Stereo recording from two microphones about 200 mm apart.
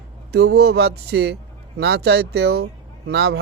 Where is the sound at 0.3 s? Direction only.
55° right (ahead or behind).